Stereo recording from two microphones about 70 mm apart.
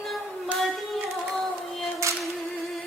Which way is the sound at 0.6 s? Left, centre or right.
Centre.